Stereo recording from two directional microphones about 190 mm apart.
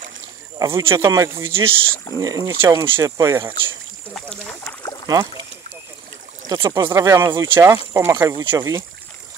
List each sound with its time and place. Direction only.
0.6 s speech: 15° right (ahead or behind)
4.1 s rowboat: 5° left (ahead or behind)
5.0 s speech: 20° right (ahead or behind)
6.4 s speech: 20° right (ahead or behind)